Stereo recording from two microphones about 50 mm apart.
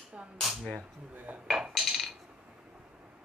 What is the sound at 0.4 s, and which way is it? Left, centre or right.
Cap gun, centre.